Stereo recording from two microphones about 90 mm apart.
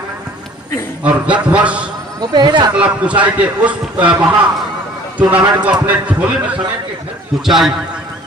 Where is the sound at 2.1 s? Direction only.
55° right (ahead or behind).